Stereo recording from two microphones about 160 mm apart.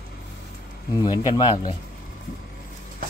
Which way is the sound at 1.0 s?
25° left (ahead or behind).